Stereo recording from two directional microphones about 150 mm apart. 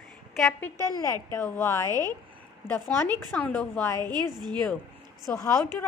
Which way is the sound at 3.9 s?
25° right (ahead or behind).